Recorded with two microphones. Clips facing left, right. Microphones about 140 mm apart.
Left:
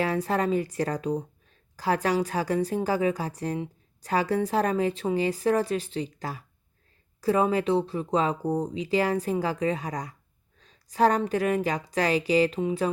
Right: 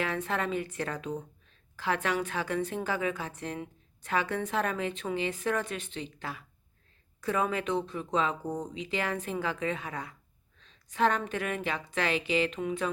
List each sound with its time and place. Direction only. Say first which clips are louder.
0.0 s speech: left 6 dB; 35° left (ahead or behind)
10.6 s a sound: left 5 dB; 35° left (ahead or behind)
11.3 s speech: left 7 dB; 35° left (ahead or behind)